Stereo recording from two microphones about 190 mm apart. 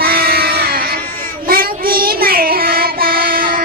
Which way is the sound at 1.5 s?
50° right (ahead or behind).